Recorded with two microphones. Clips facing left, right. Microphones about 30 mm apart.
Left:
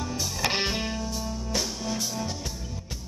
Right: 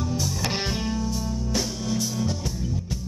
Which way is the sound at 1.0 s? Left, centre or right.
Centre.